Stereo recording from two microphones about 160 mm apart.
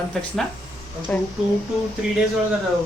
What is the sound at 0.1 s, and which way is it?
Speech, 5° left (ahead or behind).